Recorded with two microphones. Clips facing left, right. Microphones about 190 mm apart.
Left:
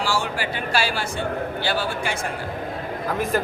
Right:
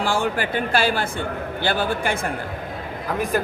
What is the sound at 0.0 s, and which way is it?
A man's voice, 55° right (ahead or behind).